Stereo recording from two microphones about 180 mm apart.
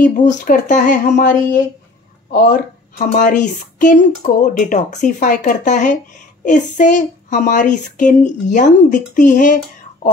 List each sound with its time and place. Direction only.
0.0 s speech: 45° left (ahead or behind)